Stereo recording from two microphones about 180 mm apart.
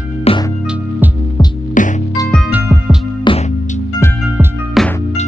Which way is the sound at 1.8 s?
45° left (ahead or behind).